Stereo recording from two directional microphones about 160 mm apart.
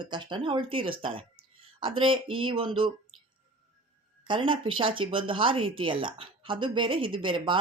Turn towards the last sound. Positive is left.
turn(degrees=-30)  # may be behind; listen again after turning